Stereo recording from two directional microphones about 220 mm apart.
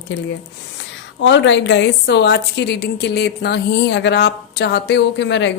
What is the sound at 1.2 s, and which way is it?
A woman's voice, 55° left (ahead or behind).